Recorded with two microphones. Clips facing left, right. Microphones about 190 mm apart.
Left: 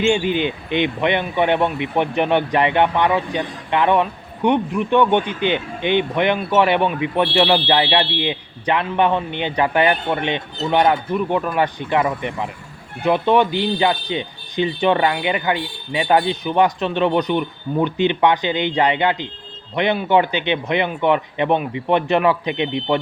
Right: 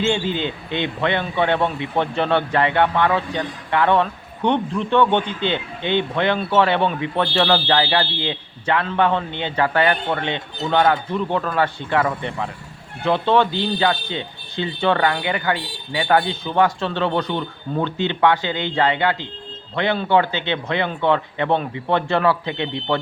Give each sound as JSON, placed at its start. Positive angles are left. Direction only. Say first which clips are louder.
{"t": 0.0, "sound": "speech", "louder": "left 3 dB", "side_deg": 15}